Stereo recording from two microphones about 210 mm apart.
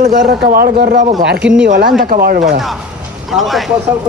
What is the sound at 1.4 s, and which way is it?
Speech, 5° right (ahead or behind).